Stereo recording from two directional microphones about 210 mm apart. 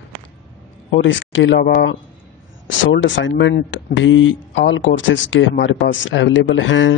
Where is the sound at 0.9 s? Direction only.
60° left (ahead or behind).